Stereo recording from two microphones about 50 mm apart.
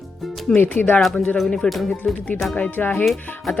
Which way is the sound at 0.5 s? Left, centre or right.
Left.